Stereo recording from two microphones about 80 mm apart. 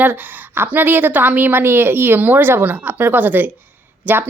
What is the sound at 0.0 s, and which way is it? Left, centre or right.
A woman's voice, right.